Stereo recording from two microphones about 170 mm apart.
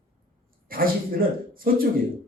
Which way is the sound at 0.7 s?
60° right (ahead or behind).